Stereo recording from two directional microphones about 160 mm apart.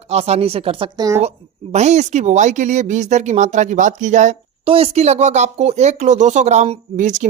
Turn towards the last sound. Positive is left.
turn(degrees=-50)  # may be behind; listen again after turning